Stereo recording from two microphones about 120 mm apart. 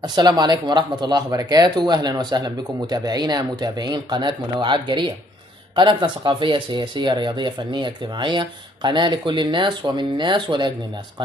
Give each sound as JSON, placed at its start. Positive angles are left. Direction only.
{"t": 0.0, "sound": "speech", "side_deg": -35}